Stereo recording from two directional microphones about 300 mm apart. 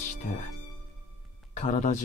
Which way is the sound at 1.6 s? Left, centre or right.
Left.